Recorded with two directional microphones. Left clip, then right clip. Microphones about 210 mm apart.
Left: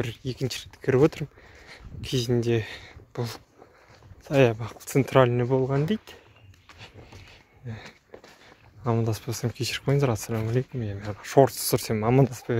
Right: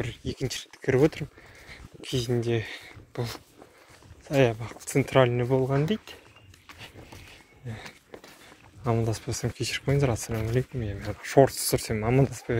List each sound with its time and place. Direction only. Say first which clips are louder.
0.0 s speech: left 2 dB; 35° left (ahead or behind)
1.7 s speech: left 2 dB; 40° left (ahead or behind)
7.6 s speech: right 1 dB; 20° left (ahead or behind)